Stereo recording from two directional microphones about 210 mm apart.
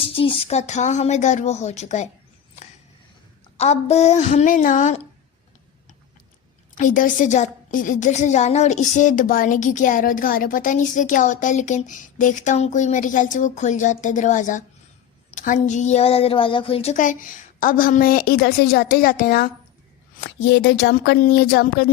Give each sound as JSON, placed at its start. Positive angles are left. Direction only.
{"t": 0.0, "sound": "a woman's voice", "side_deg": 25}
{"t": 3.6, "sound": "a woman's voice", "side_deg": 30}
{"t": 6.7, "sound": "a woman's voice", "side_deg": 40}
{"t": 20.2, "sound": "speech", "side_deg": 55}